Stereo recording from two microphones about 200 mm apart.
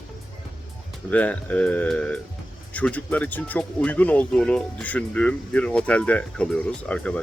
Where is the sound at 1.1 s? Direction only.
5° left (ahead or behind).